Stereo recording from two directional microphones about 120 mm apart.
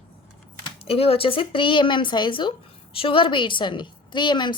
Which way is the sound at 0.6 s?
50° left (ahead or behind).